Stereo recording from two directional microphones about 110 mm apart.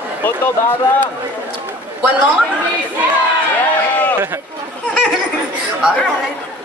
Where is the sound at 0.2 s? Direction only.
15° left (ahead or behind).